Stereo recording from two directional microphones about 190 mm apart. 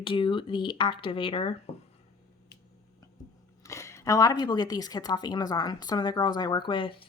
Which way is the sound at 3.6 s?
15° left (ahead or behind).